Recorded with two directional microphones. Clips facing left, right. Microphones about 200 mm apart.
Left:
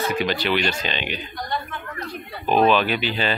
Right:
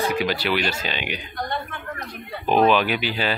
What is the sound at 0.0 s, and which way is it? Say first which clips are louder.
Speech: even; 10° right (ahead or behind).